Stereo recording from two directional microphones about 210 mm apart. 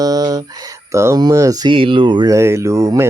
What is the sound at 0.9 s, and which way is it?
Speech, 15° right (ahead or behind).